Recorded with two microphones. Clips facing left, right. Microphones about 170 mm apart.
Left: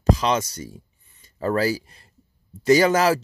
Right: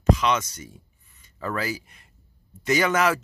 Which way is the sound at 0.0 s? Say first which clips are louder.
Left 1 dB; 35° left (ahead or behind).